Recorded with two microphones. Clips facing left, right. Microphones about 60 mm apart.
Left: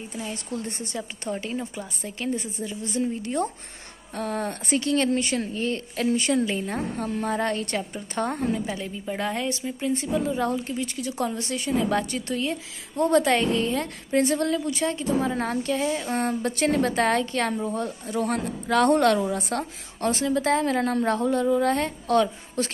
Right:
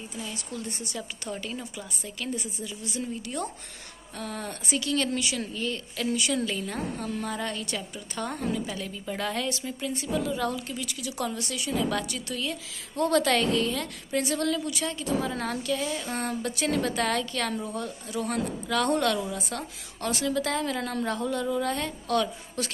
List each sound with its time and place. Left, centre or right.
0.2 s a woman's voice: left